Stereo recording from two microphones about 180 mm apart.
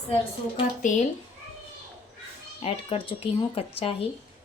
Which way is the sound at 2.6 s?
30° left (ahead or behind).